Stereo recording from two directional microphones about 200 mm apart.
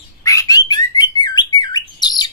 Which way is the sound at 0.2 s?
15° left (ahead or behind).